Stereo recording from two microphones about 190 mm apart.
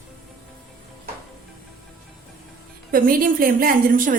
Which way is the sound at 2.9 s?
50° right (ahead or behind).